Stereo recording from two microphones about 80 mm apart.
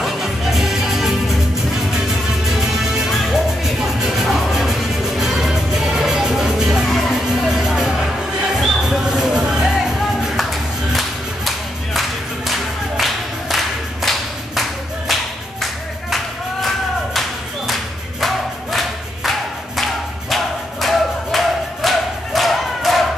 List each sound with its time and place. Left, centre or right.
0.0 s music: centre
2.8 s music: centre
18.2 s music: centre